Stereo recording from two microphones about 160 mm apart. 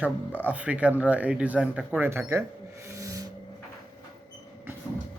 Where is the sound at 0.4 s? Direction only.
10° right (ahead or behind).